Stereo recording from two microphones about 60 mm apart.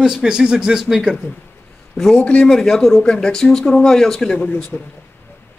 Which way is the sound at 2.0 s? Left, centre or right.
Centre.